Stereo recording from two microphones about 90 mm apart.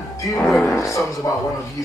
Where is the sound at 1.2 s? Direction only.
40° left (ahead or behind).